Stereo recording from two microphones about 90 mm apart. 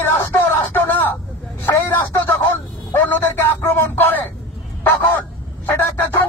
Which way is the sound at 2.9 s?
25° left (ahead or behind).